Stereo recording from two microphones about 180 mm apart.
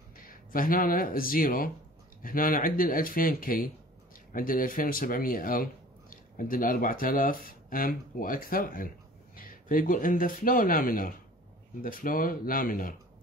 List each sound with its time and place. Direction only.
0.3 s speech: 50° left (ahead or behind)